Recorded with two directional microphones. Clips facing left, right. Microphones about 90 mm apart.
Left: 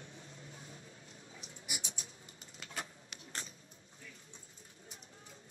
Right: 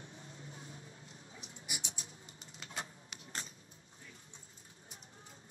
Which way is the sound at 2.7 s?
30° right (ahead or behind).